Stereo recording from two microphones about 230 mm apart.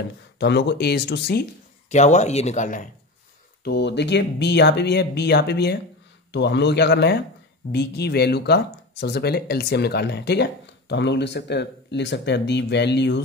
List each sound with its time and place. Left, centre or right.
0.4 s speech: left
1.9 s speech: left
3.6 s speech: left